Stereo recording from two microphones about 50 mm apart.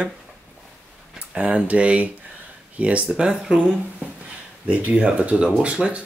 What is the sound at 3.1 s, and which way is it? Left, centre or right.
Speech, centre.